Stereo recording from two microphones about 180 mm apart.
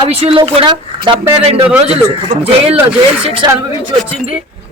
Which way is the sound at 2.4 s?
35° right (ahead or behind).